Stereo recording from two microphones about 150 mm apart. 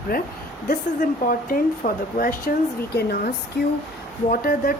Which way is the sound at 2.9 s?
90° left.